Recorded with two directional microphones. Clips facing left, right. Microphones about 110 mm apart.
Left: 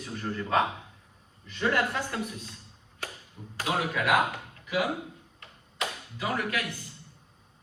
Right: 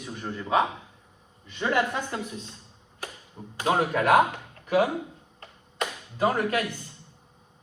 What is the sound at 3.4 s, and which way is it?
Speech, 35° right (ahead or behind).